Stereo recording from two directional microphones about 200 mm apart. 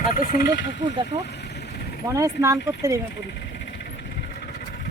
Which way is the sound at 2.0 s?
15° right (ahead or behind).